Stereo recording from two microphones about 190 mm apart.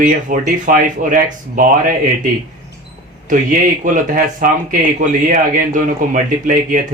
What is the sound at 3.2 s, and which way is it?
Speech, 45° right (ahead or behind).